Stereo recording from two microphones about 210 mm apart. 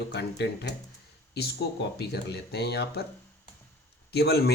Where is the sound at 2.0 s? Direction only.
50° left (ahead or behind).